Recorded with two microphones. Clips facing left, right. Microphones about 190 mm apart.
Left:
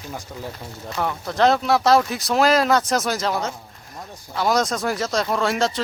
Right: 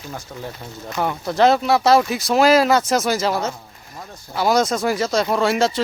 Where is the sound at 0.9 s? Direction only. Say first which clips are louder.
Right 3 dB; 5° right (ahead or behind).